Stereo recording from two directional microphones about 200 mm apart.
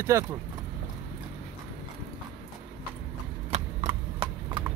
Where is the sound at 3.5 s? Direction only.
35° right (ahead or behind).